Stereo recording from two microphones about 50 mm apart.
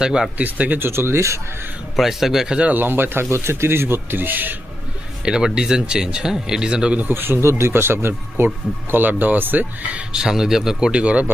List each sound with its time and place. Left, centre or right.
0.0 s speech: centre
0.3 s speech: right
0.8 s speech: right
2.0 s a man's voice: centre
2.5 s speech: right
2.7 s a man's voice: right
5.2 s a man's voice: centre
7.1 s a man's voice: right
7.4 s a man's voice: right
8.9 s speech: right
9.9 s speech: centre